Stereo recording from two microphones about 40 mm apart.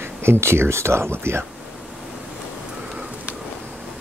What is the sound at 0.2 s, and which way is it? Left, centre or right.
Speech, right.